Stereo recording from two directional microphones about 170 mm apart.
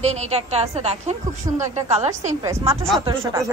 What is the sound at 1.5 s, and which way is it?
Speech, 20° right (ahead or behind).